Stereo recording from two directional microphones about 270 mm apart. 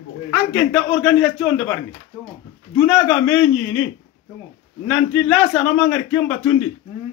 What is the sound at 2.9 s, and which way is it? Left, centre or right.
Speech, centre.